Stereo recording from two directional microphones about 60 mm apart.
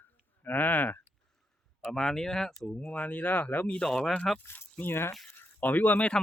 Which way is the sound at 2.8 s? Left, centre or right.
Left.